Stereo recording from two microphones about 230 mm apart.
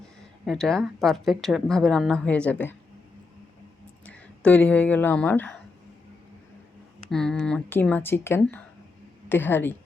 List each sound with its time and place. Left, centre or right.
0.4 s a woman's voice: centre
4.0 s speech: centre
7.1 s speech: centre